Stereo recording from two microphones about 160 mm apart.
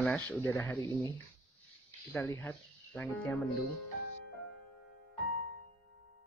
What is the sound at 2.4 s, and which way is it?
Speech, 15° left (ahead or behind).